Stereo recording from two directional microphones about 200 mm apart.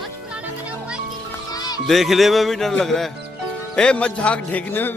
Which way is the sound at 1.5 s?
20° left (ahead or behind).